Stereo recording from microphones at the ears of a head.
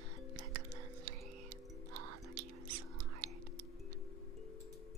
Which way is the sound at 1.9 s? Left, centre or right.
Right.